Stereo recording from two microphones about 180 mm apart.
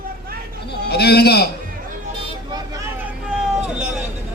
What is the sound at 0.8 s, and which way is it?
Speech, 60° left (ahead or behind).